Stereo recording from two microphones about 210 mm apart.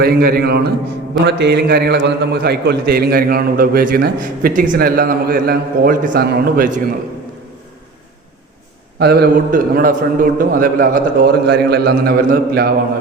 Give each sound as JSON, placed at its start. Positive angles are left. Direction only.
{"t": 0.0, "sound": "a man's voice", "side_deg": -45}
{"t": 9.0, "sound": "a man's voice", "side_deg": -50}